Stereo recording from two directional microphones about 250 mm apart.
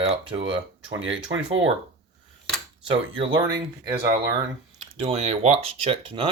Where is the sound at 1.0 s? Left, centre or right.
Right.